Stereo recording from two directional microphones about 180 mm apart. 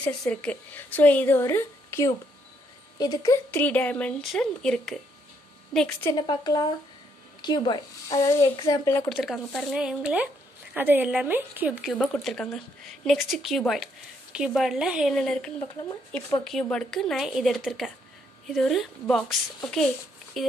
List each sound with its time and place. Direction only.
0.0 s speech: 5° left (ahead or behind)
6.1 s speech: 25° left (ahead or behind)
9.1 s speech: centre (ahead or behind)